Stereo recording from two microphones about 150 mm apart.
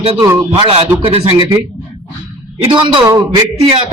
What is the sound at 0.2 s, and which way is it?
Speech, 20° right (ahead or behind).